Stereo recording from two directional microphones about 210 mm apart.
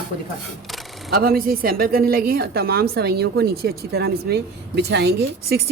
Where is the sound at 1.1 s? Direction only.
45° right (ahead or behind).